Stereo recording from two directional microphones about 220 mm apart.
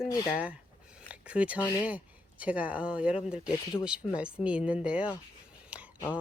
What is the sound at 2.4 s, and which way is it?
Speech, 5° right (ahead or behind).